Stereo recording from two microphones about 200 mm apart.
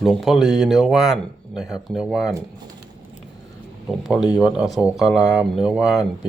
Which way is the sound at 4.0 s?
5° right (ahead or behind).